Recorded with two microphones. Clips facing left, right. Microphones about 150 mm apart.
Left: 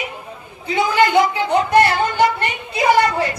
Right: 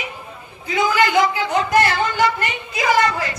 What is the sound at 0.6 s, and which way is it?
Speech, 30° left (ahead or behind).